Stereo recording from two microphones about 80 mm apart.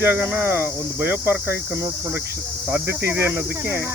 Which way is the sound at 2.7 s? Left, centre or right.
Right.